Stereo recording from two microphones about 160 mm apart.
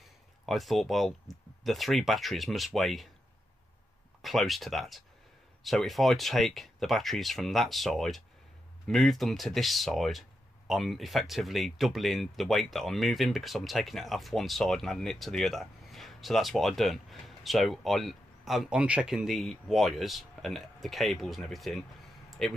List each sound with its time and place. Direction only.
0.5 s speech: centre (ahead or behind)
4.2 s speech: centre (ahead or behind)